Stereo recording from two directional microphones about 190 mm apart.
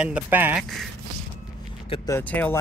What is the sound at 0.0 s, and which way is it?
Speech, 10° right (ahead or behind).